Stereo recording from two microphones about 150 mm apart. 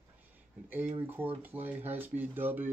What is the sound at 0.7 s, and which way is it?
Speech, 10° right (ahead or behind).